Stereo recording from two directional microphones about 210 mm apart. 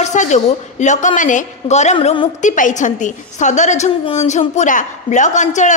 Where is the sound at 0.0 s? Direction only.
35° left (ahead or behind).